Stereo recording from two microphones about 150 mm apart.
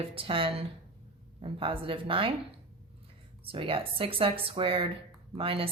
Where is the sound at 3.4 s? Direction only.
35° right (ahead or behind).